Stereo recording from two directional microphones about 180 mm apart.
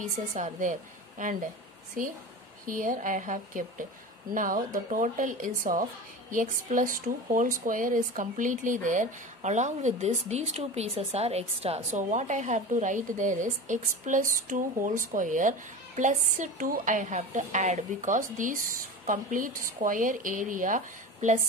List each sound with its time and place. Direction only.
0.0 s speech: 45° right (ahead or behind)